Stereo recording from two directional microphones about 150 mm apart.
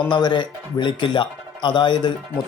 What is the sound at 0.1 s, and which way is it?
Speech, 30° left (ahead or behind).